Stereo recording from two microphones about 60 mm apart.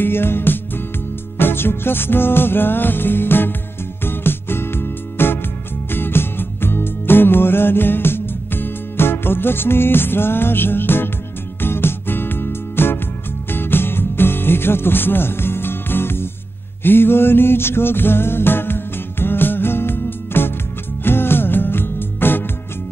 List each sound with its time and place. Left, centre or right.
0.0 s music: left